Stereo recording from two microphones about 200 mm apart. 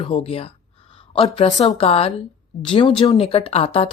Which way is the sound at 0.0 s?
25° left (ahead or behind).